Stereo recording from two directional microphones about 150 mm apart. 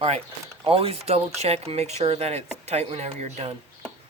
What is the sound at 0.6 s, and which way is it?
Speech, 40° right (ahead or behind).